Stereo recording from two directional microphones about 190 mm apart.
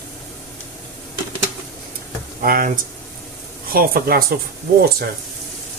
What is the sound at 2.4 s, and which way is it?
Speech, 50° right (ahead or behind).